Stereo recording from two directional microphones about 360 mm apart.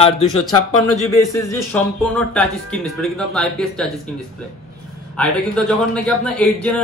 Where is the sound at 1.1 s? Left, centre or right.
Centre.